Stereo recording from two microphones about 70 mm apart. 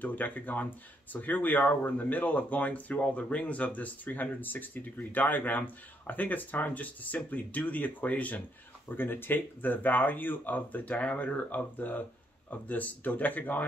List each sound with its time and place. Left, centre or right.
0.0 s speech: left